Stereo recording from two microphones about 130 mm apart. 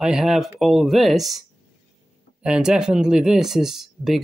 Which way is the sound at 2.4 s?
5° right (ahead or behind).